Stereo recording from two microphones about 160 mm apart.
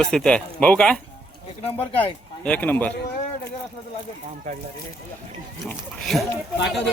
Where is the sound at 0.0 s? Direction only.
5° left (ahead or behind).